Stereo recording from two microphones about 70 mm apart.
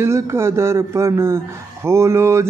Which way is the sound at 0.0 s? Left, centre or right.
Right.